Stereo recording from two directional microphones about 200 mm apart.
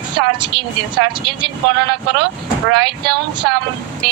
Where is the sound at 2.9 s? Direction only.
25° right (ahead or behind).